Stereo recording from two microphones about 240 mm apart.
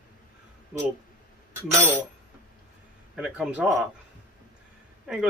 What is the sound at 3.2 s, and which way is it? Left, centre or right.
Speech, centre.